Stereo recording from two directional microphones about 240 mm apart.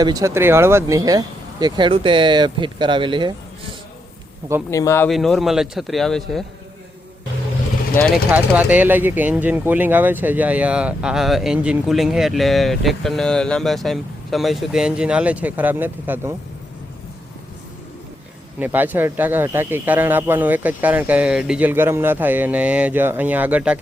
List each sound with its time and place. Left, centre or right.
0.0 s speech: centre
4.7 s speech: centre
7.9 s speech: centre
18.6 s speech: centre